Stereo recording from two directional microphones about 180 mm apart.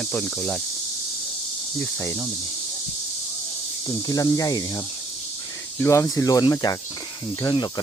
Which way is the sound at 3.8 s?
20° left (ahead or behind).